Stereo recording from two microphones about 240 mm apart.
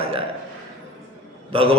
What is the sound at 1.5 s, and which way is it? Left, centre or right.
Speech, right.